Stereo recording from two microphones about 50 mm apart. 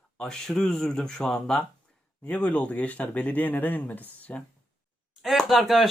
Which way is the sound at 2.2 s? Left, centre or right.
Left.